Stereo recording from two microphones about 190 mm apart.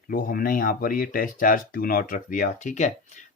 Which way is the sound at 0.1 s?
50° left (ahead or behind).